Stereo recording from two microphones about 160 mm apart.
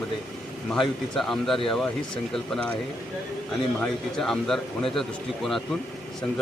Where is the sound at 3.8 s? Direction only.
5° left (ahead or behind).